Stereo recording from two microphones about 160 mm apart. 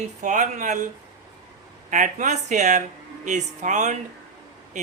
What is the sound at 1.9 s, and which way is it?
Speech, 55° right (ahead or behind).